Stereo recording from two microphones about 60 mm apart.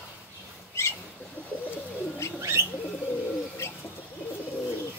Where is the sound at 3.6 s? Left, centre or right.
Left.